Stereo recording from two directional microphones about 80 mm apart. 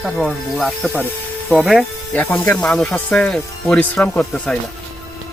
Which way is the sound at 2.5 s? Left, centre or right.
Centre.